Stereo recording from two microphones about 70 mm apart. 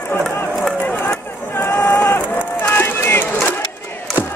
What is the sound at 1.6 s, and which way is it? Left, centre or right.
Run, left.